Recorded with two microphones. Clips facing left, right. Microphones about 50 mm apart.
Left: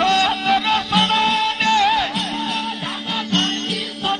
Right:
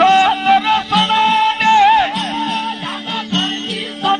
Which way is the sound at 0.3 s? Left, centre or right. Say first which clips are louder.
Right 5 dB; centre.